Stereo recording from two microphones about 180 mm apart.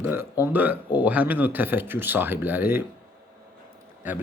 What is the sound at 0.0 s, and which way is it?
Speech, 10° right (ahead or behind).